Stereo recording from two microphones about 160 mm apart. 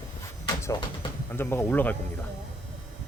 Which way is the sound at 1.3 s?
15° left (ahead or behind).